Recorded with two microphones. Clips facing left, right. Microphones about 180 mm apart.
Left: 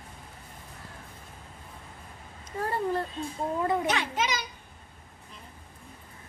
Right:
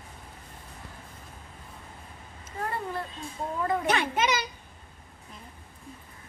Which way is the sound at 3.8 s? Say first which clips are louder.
Right 3 dB; 60° right (ahead or behind).